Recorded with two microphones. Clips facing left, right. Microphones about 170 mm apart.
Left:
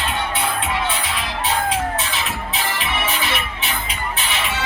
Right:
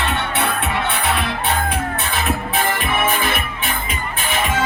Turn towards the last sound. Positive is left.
turn(degrees=-50)  # may be behind; listen again after turning